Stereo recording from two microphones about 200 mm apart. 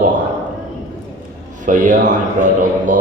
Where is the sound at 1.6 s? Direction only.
40° right (ahead or behind).